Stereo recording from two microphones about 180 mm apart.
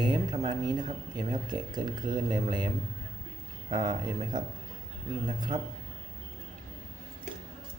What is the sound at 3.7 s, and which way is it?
Speech, 25° right (ahead or behind).